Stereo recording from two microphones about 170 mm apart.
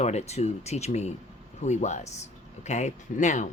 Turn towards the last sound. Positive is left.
turn(degrees=45)  # may be behind; listen again after turning